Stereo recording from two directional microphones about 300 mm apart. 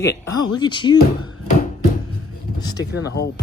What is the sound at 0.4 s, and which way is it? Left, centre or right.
Speech, centre.